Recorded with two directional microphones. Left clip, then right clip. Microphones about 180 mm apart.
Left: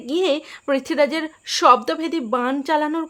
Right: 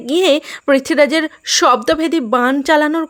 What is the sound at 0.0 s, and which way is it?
Speech, 30° right (ahead or behind).